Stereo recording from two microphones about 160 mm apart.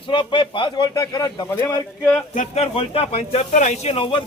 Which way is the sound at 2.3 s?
40° left (ahead or behind).